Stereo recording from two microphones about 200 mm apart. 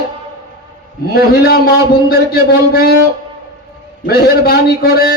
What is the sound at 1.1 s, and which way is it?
A man's voice, 50° left (ahead or behind).